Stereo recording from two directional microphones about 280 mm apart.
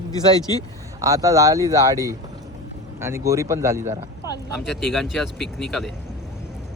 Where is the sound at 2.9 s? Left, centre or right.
Centre.